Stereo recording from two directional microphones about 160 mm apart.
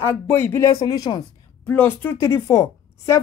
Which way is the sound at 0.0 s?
15° left (ahead or behind).